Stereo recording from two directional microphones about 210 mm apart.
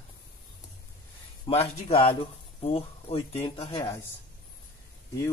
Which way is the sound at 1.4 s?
25° left (ahead or behind).